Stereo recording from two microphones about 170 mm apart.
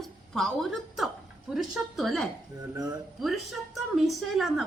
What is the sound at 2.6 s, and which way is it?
Speech, 20° right (ahead or behind).